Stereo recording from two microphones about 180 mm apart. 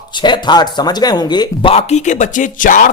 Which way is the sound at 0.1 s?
25° left (ahead or behind).